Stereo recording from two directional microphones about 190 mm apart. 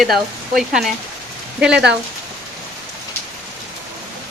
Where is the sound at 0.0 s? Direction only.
Centre (ahead or behind).